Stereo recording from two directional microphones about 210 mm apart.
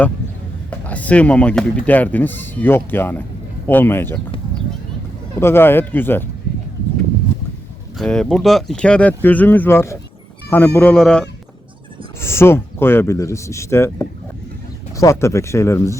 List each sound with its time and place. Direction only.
0.7 s speech: 5° left (ahead or behind)
5.4 s speech: 10° left (ahead or behind)
7.9 s speech: 5° left (ahead or behind)